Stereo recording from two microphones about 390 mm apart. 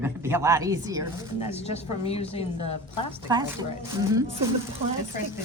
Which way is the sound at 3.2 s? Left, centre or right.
Centre.